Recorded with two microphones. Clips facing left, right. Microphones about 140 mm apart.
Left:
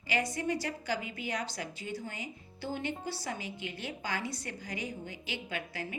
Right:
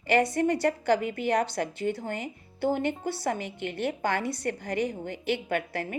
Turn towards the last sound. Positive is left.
turn(degrees=-60)  # may be behind; listen again after turning